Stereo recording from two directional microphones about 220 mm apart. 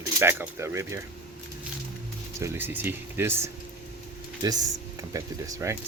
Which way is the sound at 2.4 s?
10° right (ahead or behind).